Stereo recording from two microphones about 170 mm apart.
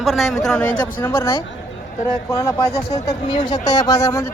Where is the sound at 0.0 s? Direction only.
Centre (ahead or behind).